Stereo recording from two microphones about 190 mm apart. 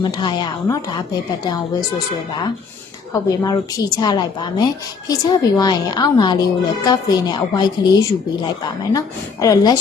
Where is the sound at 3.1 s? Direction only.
20° left (ahead or behind).